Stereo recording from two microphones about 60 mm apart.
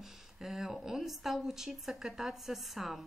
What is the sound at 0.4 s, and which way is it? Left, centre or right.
Speech, centre.